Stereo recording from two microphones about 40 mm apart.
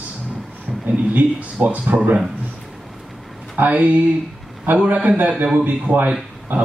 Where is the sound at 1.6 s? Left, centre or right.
Right.